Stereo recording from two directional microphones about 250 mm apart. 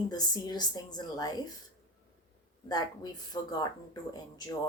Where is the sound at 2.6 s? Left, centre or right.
Centre.